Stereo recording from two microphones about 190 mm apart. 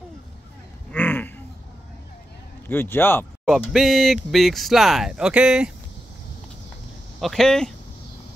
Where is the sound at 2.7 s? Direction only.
10° left (ahead or behind).